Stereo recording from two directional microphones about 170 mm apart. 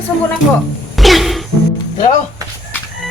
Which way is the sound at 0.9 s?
Centre (ahead or behind).